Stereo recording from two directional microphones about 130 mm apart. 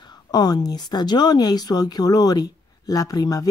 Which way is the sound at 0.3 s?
30° left (ahead or behind).